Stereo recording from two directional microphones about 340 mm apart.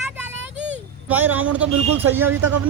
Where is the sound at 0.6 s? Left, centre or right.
Right.